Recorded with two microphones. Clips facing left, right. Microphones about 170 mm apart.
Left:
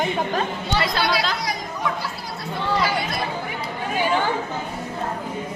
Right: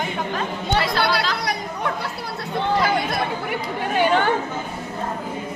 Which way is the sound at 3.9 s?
65° right (ahead or behind).